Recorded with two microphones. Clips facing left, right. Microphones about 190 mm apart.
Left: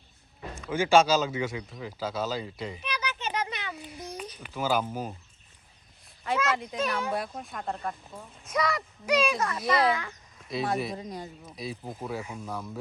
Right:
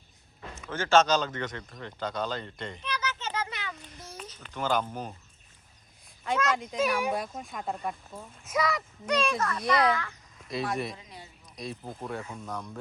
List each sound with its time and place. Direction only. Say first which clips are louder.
0.7 s speech: left 2 dB; 10° left (ahead or behind)
3.8 s a sound: left 6 dB; 10° left (ahead or behind)
6.2 s speech: even; 5° left (ahead or behind)
10.5 s speech: left 2 dB; centre (ahead or behind)
10.9 s speech: left 10 dB; 40° left (ahead or behind)
11.5 s speech: even; centre (ahead or behind)